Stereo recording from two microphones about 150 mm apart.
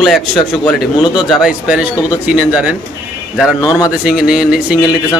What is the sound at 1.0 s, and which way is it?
Speech, 30° left (ahead or behind).